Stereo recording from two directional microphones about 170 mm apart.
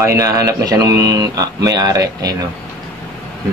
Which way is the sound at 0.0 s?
20° right (ahead or behind).